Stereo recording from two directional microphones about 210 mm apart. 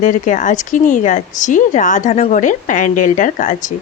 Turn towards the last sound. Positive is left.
turn(degrees=40)  # may be behind; listen again after turning